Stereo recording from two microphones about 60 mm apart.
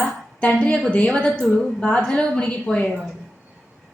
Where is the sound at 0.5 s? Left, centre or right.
Centre.